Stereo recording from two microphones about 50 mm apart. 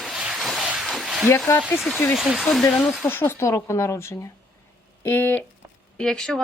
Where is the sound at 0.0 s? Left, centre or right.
Centre.